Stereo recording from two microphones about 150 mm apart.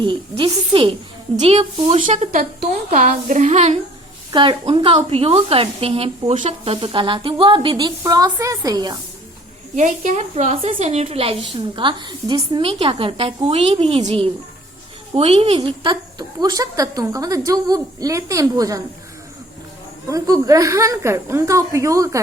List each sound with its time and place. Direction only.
0.0 s a woman's voice: 35° right (ahead or behind)
4.3 s speech: 35° right (ahead or behind)
9.7 s a woman's voice: 55° right (ahead or behind)
15.1 s a woman's voice: 40° right (ahead or behind)
20.1 s a woman's voice: 20° right (ahead or behind)